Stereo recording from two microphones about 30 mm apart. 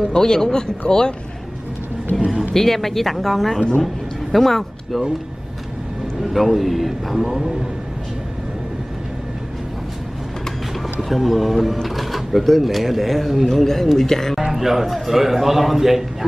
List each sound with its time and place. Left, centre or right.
0.2 s speech: centre
2.1 s a sound: left
2.5 s speech: centre
6.2 s speech: centre
11.1 s speech: centre
13.6 s speech: centre
14.4 s a man's voice: centre